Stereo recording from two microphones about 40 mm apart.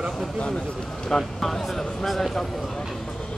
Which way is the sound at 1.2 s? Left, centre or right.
Centre.